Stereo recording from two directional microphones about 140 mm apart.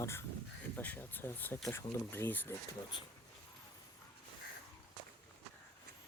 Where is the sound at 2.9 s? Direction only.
30° left (ahead or behind).